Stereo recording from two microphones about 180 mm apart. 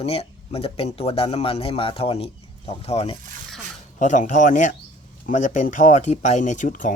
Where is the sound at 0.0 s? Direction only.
35° left (ahead or behind).